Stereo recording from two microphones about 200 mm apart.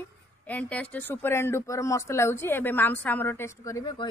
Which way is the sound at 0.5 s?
5° left (ahead or behind).